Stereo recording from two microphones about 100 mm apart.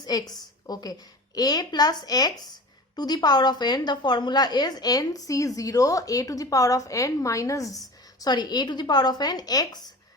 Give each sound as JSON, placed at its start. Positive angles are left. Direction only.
{"t": 0.0, "sound": "a woman's voice", "side_deg": 40}
{"t": 8.2, "sound": "speech", "side_deg": 45}